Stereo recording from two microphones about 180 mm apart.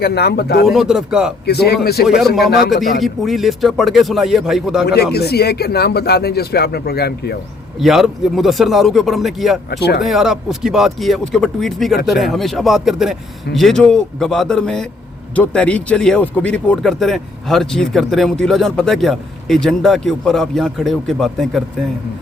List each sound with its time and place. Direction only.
0.0 s speech: 65° left (ahead or behind)
0.7 s speech: centre (ahead or behind)
1.5 s speech: 65° left (ahead or behind)
2.0 s speech: centre (ahead or behind)
2.4 s speech: 60° left (ahead or behind)
3.0 s speech: centre (ahead or behind)
5.1 s speech: 65° left (ahead or behind)
7.8 s speech: centre (ahead or behind)
9.6 s speech: 65° left (ahead or behind)
10.0 s speech: centre (ahead or behind)